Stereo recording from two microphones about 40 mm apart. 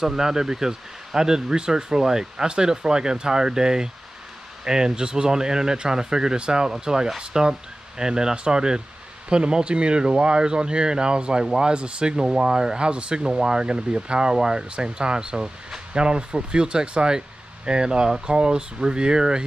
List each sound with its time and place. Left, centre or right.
0.0 s speech: centre